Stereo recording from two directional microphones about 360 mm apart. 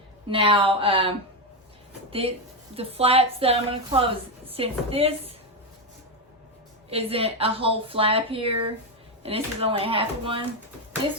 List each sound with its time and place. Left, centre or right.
0.3 s a woman's voice: centre
6.9 s a woman's voice: centre